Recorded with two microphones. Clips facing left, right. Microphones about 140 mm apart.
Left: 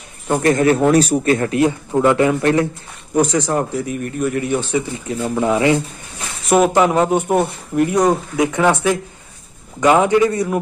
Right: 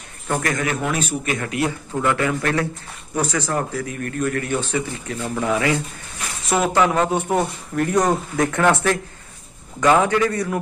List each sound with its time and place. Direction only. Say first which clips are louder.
0.3 s a man's voice: left 9 dB; 25° left (ahead or behind)